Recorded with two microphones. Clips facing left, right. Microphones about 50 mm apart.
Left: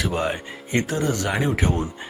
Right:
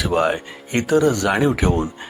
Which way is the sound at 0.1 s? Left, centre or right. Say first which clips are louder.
Right 6 dB; right.